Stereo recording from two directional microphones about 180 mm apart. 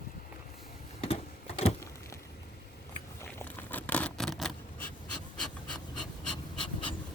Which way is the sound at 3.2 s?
10° left (ahead or behind).